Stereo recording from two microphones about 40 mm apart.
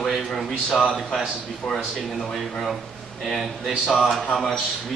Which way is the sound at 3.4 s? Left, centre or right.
Centre.